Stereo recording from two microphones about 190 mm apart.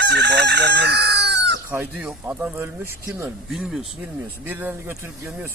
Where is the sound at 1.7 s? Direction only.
10° right (ahead or behind).